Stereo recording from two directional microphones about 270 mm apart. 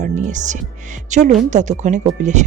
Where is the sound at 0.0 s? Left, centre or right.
Right.